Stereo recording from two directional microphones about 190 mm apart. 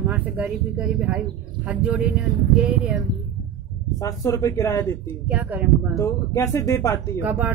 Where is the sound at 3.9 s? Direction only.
15° left (ahead or behind).